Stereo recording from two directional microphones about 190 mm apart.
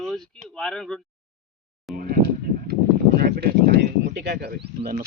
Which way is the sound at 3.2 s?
55° right (ahead or behind).